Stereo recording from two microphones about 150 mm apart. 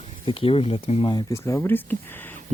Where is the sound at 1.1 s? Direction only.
25° left (ahead or behind).